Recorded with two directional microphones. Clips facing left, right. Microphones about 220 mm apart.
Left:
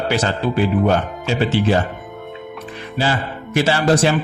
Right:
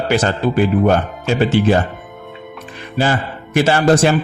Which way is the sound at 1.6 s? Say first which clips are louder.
Right 4 dB; 50° right (ahead or behind).